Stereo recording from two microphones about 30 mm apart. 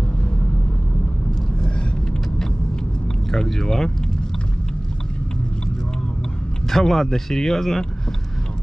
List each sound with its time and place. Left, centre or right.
3.3 s speech: centre
6.7 s speech: centre